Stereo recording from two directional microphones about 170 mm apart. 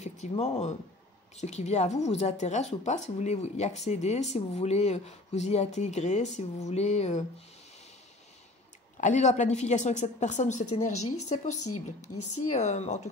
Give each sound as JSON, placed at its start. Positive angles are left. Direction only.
{"t": 0.0, "sound": "speech", "side_deg": 40}
{"t": 9.0, "sound": "a woman's voice", "side_deg": 45}